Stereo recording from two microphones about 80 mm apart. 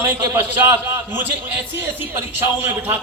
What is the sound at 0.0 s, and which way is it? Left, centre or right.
A man's voice, right.